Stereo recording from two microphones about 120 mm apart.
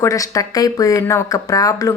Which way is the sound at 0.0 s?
25° left (ahead or behind).